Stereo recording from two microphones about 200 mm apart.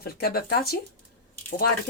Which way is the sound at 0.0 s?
50° left (ahead or behind).